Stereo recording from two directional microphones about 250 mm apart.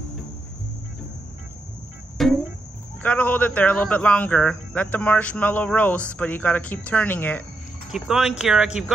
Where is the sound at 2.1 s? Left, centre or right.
Centre.